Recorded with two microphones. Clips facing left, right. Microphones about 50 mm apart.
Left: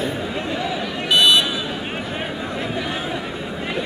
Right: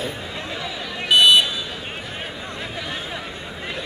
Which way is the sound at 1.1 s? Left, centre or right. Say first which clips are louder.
Right 1 dB; centre.